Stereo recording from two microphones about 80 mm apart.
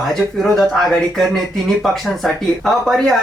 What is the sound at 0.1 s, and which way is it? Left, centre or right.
Speech, centre.